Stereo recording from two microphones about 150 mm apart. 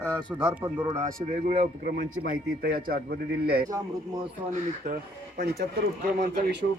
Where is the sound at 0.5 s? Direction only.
15° right (ahead or behind).